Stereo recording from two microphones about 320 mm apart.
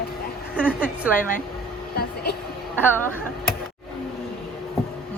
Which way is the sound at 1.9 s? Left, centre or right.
Left.